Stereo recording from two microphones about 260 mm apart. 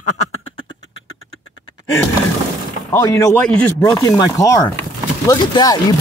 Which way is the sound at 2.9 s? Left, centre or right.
Centre.